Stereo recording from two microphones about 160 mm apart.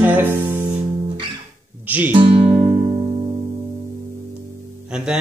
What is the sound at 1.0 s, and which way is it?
Music, 30° right (ahead or behind).